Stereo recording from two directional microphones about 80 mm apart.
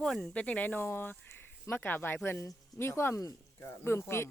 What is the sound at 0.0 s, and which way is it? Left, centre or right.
Speech, centre.